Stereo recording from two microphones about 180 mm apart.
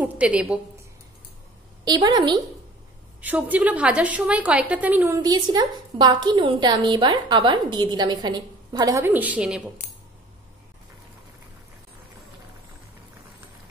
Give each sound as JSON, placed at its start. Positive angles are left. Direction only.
{"t": 0.0, "sound": "a woman's voice", "side_deg": -5}
{"t": 1.9, "sound": "a woman's voice", "side_deg": -20}
{"t": 3.2, "sound": "a woman's voice", "side_deg": -10}